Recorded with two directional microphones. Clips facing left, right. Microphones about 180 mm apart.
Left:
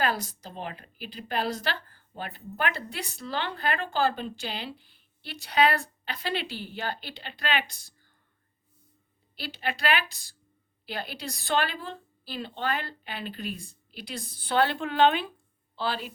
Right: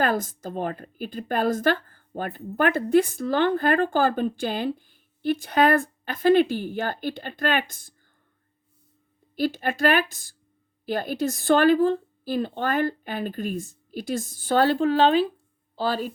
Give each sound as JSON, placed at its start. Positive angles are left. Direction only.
{"t": 0.0, "sound": "a woman's voice", "side_deg": -50}
{"t": 9.3, "sound": "a woman's voice", "side_deg": -45}